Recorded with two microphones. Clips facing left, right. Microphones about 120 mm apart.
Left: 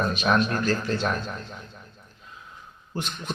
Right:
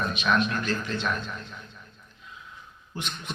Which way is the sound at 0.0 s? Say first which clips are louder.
Left 2 dB; 40° left (ahead or behind).